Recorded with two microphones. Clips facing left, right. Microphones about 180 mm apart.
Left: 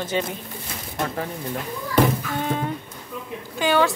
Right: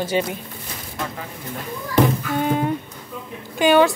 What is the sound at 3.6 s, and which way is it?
Speech, 15° right (ahead or behind).